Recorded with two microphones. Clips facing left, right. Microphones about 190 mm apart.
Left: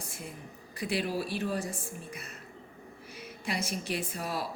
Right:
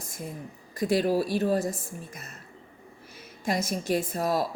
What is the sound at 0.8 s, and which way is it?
A woman's voice, 40° right (ahead or behind).